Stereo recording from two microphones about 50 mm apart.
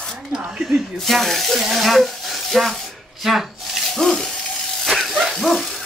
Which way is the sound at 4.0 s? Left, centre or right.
Centre.